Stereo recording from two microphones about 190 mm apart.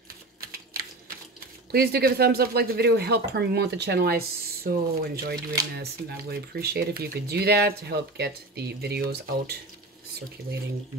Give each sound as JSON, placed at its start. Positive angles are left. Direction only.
{"t": 0.4, "sound": "typewriter", "side_deg": -50}
{"t": 1.7, "sound": "speech", "side_deg": -55}